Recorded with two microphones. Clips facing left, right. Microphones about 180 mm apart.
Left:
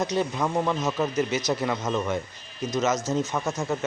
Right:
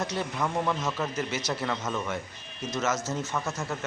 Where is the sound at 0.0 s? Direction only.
20° left (ahead or behind).